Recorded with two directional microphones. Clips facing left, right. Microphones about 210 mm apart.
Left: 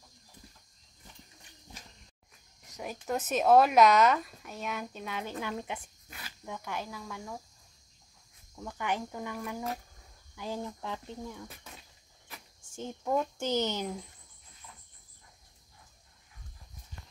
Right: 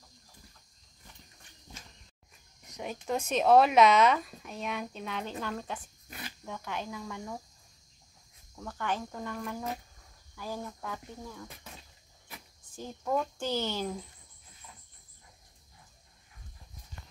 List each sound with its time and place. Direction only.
2.7 s a woman's voice: 5° left (ahead or behind)
8.5 s speech: 15° left (ahead or behind)
10.3 s speech: 20° left (ahead or behind)
13.0 s speech: 10° left (ahead or behind)
13.4 s speech: 20° left (ahead or behind)